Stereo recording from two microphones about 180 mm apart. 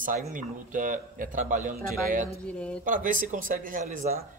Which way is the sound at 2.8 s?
50° right (ahead or behind).